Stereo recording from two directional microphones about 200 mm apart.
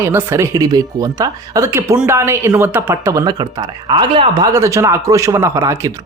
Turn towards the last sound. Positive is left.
turn(degrees=-15)  # may be behind; listen again after turning